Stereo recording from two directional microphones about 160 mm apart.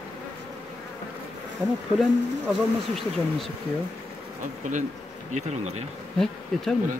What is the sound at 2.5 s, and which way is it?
Speech, centre (ahead or behind).